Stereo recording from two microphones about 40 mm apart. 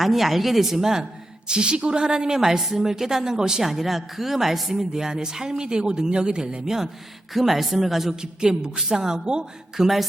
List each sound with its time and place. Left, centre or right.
0.0 s a woman's voice: centre
1.5 s a woman's voice: right; by 8.1 s centre
8.2 s a woman's voice: centre
9.8 s a woman's voice: centre